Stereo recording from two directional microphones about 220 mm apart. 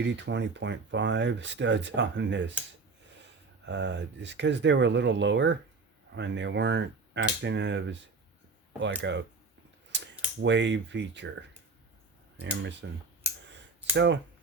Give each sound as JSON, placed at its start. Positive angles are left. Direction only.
{"t": 0.0, "sound": "speech", "side_deg": -55}
{"t": 3.7, "sound": "speech", "side_deg": -55}
{"t": 9.0, "sound": "speech", "side_deg": -55}
{"t": 9.9, "sound": "cap gun", "side_deg": -55}
{"t": 10.4, "sound": "speech", "side_deg": -55}
{"t": 12.8, "sound": "speech", "side_deg": -55}